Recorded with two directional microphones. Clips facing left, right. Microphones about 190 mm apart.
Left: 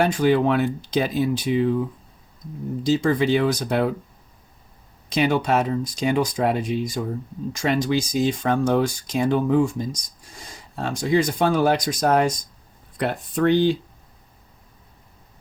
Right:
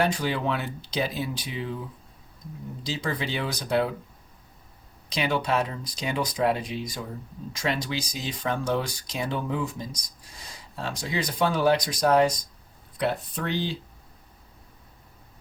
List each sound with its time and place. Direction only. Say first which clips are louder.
0.0 s speech: left 7 dB; 50° left (ahead or behind)
2.8 s speech: left 11 dB; 50° left (ahead or behind)
5.0 s speech: left 6 dB; 50° left (ahead or behind)